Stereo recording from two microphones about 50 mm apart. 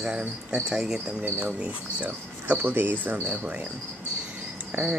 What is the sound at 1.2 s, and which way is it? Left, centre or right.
Speech, right.